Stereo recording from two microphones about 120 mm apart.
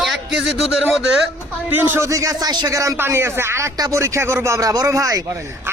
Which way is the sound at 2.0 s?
30° right (ahead or behind).